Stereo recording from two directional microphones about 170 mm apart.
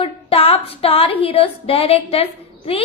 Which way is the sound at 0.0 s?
35° left (ahead or behind).